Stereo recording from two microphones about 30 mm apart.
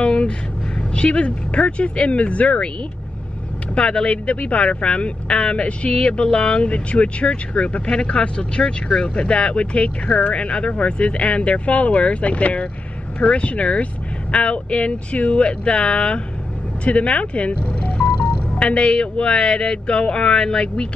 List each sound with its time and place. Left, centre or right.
0.0 s vehicle: left
0.7 s speech: left
3.7 s speech: left
4.1 s speech: left